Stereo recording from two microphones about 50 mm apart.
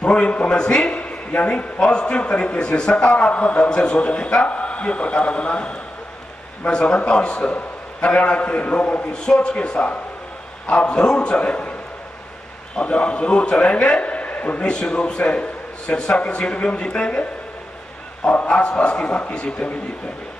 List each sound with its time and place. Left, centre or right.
0.0 s a man's voice: left
12.7 s a man's voice: left
14.7 s a man's voice: centre